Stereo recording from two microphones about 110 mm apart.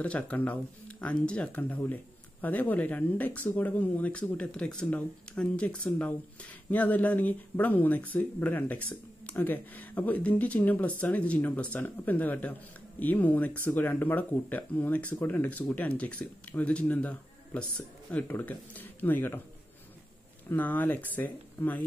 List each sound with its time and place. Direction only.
0.0 s speech: 10° left (ahead or behind)
20.4 s speech: 15° left (ahead or behind)